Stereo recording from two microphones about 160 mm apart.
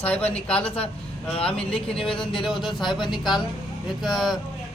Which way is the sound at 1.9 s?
5° left (ahead or behind).